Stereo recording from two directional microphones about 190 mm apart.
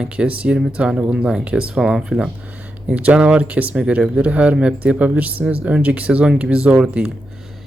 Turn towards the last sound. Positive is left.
turn(degrees=-5)  # may be behind; listen again after turning